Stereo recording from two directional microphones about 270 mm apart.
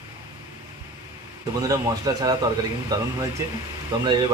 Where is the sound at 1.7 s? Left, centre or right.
Centre.